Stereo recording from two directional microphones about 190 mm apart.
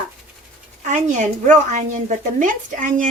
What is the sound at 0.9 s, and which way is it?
A woman's voice, 40° right (ahead or behind).